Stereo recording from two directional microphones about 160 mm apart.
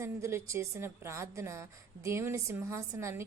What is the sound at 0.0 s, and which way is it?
A woman's voice, 15° right (ahead or behind).